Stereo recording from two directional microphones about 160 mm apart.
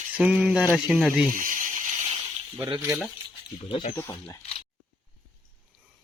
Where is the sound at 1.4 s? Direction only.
55° right (ahead or behind).